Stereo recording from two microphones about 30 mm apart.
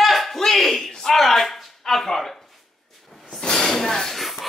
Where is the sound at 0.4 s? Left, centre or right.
Centre.